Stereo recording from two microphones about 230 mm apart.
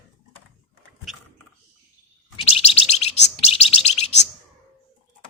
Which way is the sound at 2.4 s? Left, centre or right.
Left.